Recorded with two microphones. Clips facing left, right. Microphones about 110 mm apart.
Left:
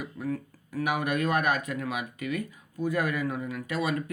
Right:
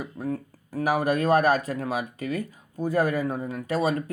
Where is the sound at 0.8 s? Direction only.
35° right (ahead or behind).